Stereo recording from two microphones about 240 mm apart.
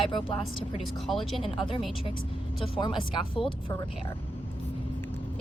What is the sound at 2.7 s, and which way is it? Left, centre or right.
Speech, centre.